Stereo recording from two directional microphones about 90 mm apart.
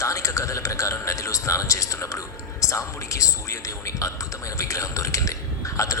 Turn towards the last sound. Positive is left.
turn(degrees=35)  # may be behind; listen again after turning